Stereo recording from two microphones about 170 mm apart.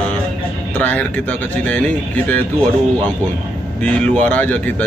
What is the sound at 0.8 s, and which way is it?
Speech, 10° left (ahead or behind).